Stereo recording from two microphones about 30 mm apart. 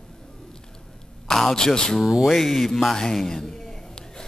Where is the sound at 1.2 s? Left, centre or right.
Centre.